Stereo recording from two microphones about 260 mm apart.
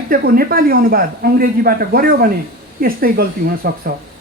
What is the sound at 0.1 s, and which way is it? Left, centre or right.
Speech, right.